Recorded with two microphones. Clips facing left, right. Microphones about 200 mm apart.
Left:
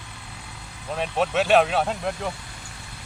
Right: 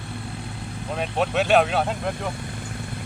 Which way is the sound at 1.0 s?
Centre (ahead or behind).